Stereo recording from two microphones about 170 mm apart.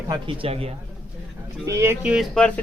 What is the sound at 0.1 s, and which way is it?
Speech, 30° right (ahead or behind).